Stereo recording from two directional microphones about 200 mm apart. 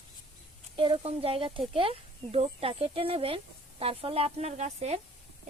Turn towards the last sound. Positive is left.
turn(degrees=-35)  # may be behind; listen again after turning